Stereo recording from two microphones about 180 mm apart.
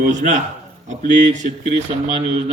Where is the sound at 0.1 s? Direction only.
40° right (ahead or behind).